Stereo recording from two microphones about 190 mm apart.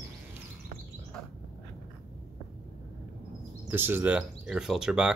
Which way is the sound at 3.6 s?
10° right (ahead or behind).